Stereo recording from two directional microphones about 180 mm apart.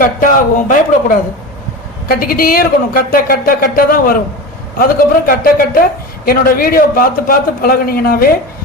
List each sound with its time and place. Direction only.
0.0 s a woman's voice: 50° left (ahead or behind)
2.0 s a woman's voice: 55° left (ahead or behind)